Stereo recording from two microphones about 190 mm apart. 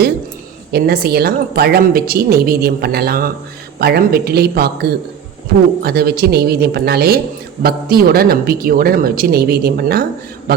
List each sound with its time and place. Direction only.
0.7 s a woman's voice: 55° right (ahead or behind)